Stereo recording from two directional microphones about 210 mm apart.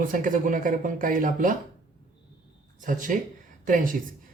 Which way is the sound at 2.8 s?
40° right (ahead or behind).